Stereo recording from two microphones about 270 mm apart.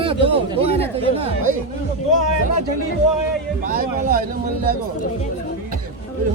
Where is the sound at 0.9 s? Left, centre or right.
Right.